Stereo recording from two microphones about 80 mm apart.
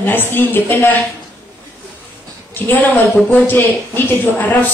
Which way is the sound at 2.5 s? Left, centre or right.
Left.